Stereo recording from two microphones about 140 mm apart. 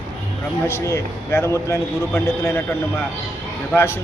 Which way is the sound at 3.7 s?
15° left (ahead or behind).